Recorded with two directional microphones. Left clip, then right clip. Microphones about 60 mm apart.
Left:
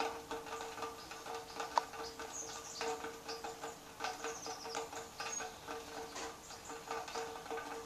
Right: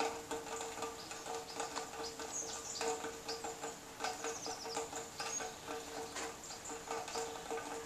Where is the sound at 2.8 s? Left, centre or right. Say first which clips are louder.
Right 1 dB; right.